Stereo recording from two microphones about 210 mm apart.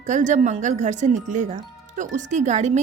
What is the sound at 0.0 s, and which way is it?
A woman's voice, 35° right (ahead or behind).